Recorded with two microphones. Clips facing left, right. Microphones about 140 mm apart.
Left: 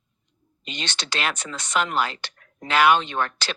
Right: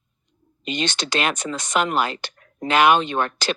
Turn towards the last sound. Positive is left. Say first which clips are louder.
# right 3 dB
turn(degrees=-15)  # may be behind; listen again after turning